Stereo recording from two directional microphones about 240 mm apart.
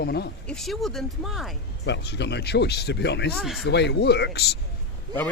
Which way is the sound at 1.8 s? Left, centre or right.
Left.